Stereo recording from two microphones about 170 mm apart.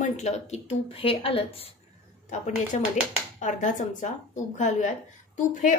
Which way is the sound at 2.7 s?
45° left (ahead or behind).